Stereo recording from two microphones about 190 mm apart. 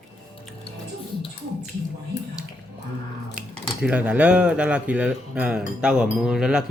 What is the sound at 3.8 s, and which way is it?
Speech, 5° right (ahead or behind).